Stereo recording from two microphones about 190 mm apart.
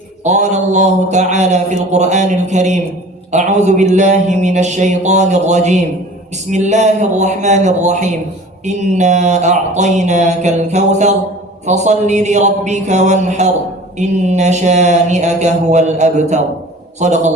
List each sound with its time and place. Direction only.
0.3 s mantra: 35° right (ahead or behind)